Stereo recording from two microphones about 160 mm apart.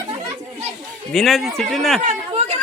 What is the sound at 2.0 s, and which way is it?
Chatter, 45° right (ahead or behind).